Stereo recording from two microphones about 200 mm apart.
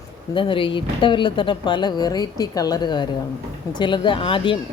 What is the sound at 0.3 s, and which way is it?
Speech, 25° left (ahead or behind).